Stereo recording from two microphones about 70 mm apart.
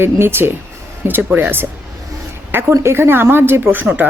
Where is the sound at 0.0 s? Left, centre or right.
Right.